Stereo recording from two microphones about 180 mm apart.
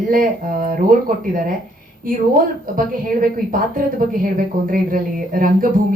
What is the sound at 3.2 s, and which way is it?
Speech, 50° right (ahead or behind).